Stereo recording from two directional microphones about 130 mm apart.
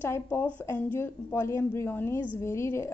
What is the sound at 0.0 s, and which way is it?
A woman's voice, 15° left (ahead or behind).